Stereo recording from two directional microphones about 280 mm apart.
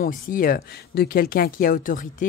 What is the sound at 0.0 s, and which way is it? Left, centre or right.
Speech, left.